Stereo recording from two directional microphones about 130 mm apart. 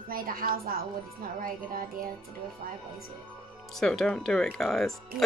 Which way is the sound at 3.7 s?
Centre (ahead or behind).